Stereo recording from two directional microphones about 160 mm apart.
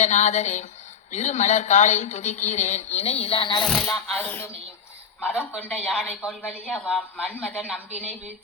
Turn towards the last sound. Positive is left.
turn(degrees=5)  # may be behind; listen again after turning